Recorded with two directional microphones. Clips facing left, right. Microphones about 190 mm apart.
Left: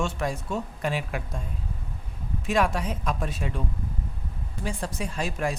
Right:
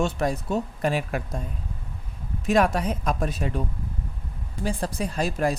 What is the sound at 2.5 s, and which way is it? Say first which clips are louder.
Speech: right 4 dB; 40° right (ahead or behind).